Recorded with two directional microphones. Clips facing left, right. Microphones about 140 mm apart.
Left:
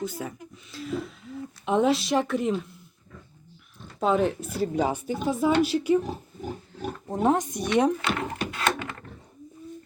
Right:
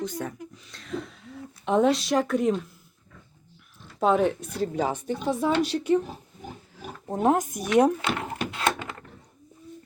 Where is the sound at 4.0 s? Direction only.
Centre (ahead or behind).